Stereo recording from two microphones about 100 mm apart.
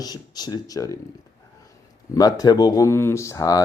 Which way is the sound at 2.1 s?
40° left (ahead or behind).